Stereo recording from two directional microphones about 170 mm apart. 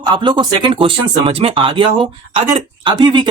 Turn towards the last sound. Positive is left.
turn(degrees=-25)  # may be behind; listen again after turning